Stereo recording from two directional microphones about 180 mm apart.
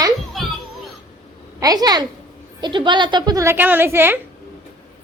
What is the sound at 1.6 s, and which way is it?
A woman's voice, 20° right (ahead or behind).